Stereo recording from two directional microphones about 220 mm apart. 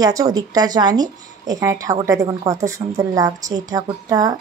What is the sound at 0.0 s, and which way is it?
Speech, 15° right (ahead or behind).